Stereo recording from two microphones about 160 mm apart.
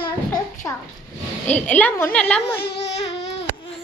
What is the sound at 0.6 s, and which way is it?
Speech, 20° left (ahead or behind).